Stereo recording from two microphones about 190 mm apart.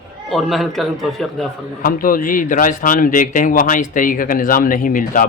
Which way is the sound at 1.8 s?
45° left (ahead or behind).